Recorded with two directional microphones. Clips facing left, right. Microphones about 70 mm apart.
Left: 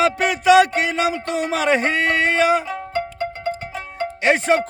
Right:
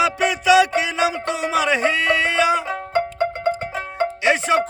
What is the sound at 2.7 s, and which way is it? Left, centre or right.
Music, right.